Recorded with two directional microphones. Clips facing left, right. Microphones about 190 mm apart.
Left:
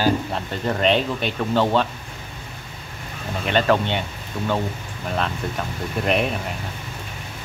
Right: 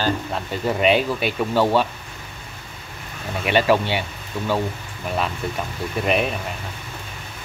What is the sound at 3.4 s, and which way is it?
Speech, 10° right (ahead or behind).